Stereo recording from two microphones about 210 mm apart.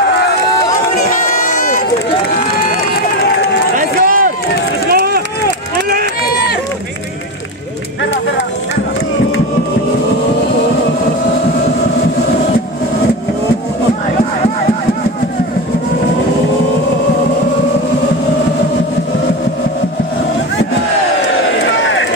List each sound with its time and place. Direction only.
3.7 s a sound: 40° right (ahead or behind)
4.9 s run: 45° right (ahead or behind)
21.6 s run: 65° left (ahead or behind)